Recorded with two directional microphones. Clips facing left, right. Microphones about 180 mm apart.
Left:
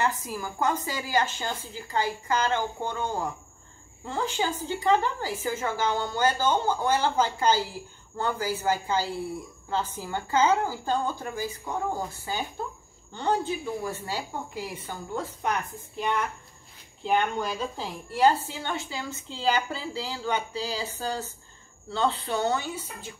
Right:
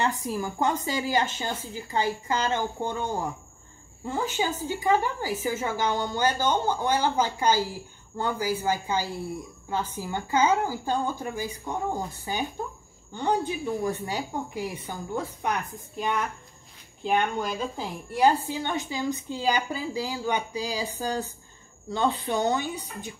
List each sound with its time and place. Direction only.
0.0 s a woman's voice: 20° right (ahead or behind)
17.0 s speech: centre (ahead or behind)
18.1 s a woman's voice: 15° right (ahead or behind)